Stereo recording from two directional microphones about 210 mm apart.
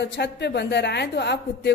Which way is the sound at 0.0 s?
55° left (ahead or behind).